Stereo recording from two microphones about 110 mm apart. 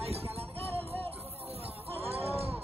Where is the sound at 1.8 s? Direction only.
65° right (ahead or behind).